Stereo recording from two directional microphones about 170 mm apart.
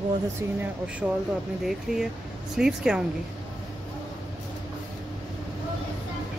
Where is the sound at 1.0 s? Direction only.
5° right (ahead or behind).